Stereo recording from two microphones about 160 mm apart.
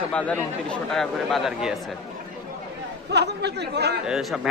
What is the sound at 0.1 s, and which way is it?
A man's voice, 10° left (ahead or behind).